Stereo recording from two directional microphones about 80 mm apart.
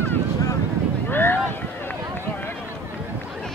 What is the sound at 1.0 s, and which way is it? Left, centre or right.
Boat, left.